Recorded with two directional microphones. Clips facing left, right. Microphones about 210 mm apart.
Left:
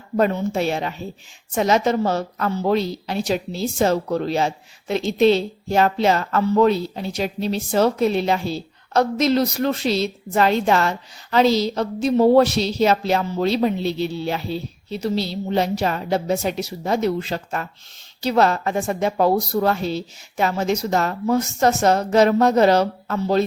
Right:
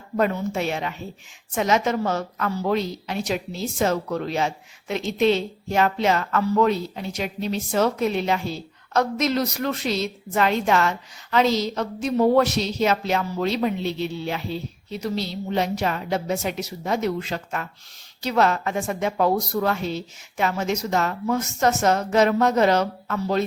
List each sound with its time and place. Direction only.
0.2 s a woman's voice: 35° left (ahead or behind)